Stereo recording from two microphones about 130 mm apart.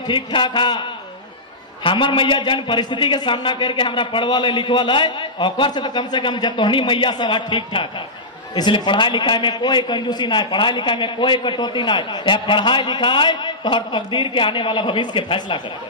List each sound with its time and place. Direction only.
0.0 s a man's voice: 35° left (ahead or behind)